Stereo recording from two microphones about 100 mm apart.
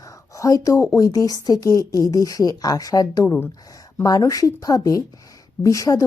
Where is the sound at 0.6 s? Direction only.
30° left (ahead or behind).